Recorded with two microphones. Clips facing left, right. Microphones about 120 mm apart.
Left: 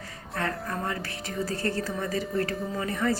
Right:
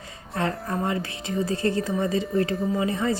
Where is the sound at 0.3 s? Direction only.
25° right (ahead or behind).